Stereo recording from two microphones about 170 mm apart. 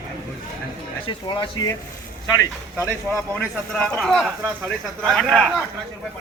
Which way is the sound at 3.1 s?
5° left (ahead or behind).